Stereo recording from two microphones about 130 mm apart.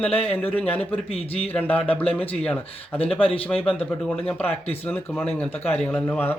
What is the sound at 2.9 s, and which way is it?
Speech, 45° left (ahead or behind).